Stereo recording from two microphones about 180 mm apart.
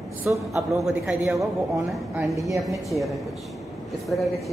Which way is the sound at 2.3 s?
15° right (ahead or behind).